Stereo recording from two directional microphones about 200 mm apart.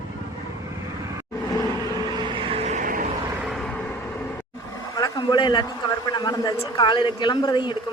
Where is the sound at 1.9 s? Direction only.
20° right (ahead or behind); by 3.0 s 40° right (ahead or behind).